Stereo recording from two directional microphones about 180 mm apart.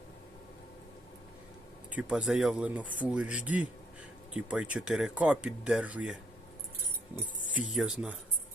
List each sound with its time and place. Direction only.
2.0 s speech: 5° right (ahead or behind)
7.7 s speech: centre (ahead or behind)